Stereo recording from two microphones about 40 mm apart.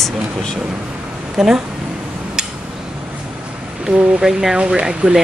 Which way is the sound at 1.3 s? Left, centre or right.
Centre.